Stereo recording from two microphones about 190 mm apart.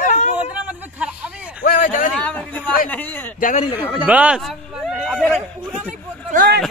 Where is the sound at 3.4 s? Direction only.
45° left (ahead or behind).